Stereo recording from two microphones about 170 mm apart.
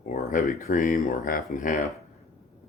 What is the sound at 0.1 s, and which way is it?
Speech, 50° left (ahead or behind).